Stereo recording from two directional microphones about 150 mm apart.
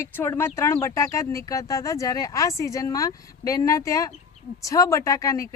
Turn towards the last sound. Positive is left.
turn(degrees=20)  # may be behind; listen again after turning